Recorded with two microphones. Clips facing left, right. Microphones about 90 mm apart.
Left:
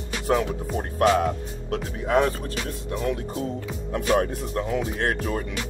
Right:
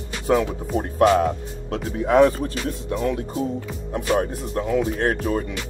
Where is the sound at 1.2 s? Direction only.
30° right (ahead or behind).